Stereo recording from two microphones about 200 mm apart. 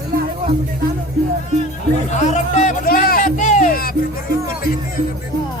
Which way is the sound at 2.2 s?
35° left (ahead or behind).